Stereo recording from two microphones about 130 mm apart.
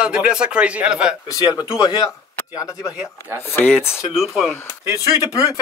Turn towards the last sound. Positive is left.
turn(degrees=25)  # may be behind; listen again after turning